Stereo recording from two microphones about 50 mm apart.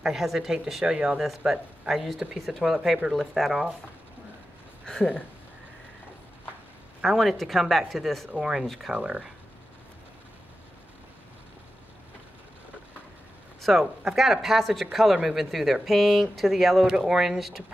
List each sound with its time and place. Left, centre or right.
0.0 s speech: centre
7.0 s speech: centre
8.3 s speech: centre
8.6 s speech: centre
8.9 s speech: right
13.6 s a sound: centre
14.1 s speech: centre